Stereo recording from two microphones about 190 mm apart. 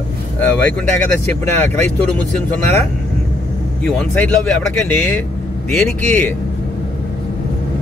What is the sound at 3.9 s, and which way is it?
Speech, 5° left (ahead or behind).